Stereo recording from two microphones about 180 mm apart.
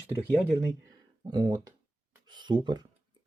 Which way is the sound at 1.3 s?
25° right (ahead or behind).